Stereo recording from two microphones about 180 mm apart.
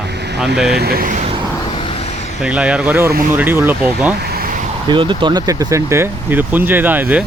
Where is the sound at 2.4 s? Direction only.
5° right (ahead or behind).